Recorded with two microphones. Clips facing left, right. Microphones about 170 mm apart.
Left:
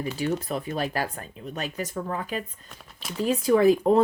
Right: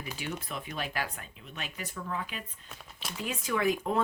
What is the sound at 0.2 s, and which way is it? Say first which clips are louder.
Speech: left 10 dB; 40° left (ahead or behind).